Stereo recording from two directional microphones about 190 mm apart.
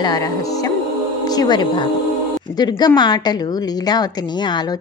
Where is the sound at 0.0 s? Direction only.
20° left (ahead or behind).